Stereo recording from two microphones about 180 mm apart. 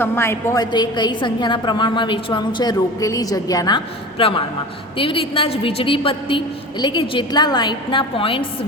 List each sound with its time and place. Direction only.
0.0 s a woman's voice: 15° left (ahead or behind); by 8.4 s 30° left (ahead or behind)